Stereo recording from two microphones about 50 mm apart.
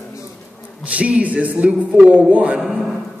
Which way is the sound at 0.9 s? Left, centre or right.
Right.